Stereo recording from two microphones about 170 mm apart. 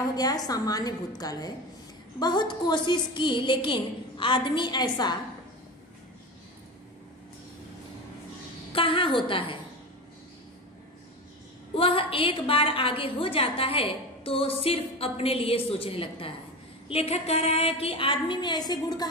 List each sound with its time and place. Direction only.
0.1 s a woman's voice: 25° left (ahead or behind)
8.7 s a woman's voice: 30° left (ahead or behind)
11.7 s a woman's voice: 35° left (ahead or behind)